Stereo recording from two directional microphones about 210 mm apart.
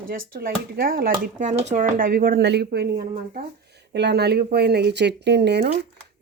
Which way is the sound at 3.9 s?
50° right (ahead or behind).